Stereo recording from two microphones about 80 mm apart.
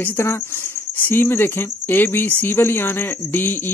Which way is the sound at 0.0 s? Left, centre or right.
Left.